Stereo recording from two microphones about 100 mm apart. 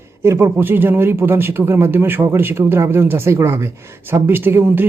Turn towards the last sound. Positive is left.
turn(degrees=-20)  # may be behind; listen again after turning